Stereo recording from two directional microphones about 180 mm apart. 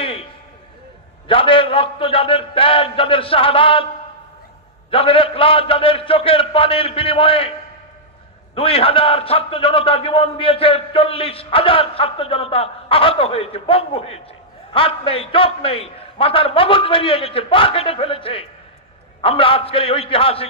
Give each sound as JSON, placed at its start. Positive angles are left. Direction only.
{"t": 1.2, "sound": "a man's voice", "side_deg": 30}
{"t": 4.9, "sound": "a man's voice", "side_deg": 30}
{"t": 8.5, "sound": "a man's voice", "side_deg": 30}